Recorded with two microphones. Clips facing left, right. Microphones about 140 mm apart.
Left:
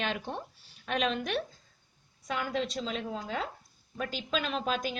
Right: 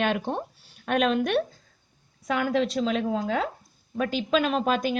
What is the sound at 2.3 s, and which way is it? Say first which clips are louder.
A woman's voice: right 8 dB; 70° right (ahead or behind).